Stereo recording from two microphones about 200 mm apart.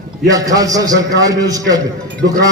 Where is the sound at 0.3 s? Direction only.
15° right (ahead or behind).